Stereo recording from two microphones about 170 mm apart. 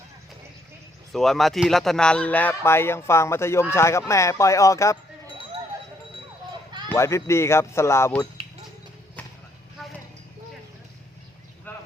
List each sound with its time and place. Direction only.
1.1 s a man's voice: centre (ahead or behind); by 4.9 s 20° left (ahead or behind)
6.8 s a man's voice: 15° left (ahead or behind)
11.7 s boat: 10° left (ahead or behind)